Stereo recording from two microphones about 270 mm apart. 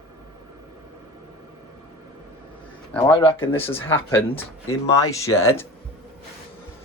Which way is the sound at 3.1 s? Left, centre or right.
Centre.